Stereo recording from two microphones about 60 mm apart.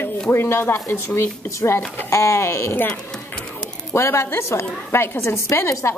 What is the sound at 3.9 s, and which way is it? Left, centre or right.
A woman's voice, left.